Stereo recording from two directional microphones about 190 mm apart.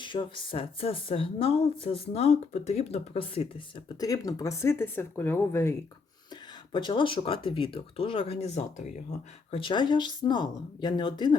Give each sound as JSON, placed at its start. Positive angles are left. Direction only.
{"t": 0.0, "sound": "a woman's voice", "side_deg": 25}
{"t": 3.8, "sound": "speech", "side_deg": 20}
{"t": 6.7, "sound": "a woman's voice", "side_deg": 25}
{"t": 9.5, "sound": "a woman's voice", "side_deg": 25}